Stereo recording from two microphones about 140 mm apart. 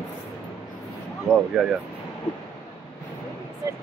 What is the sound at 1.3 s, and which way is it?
Speech, 5° left (ahead or behind).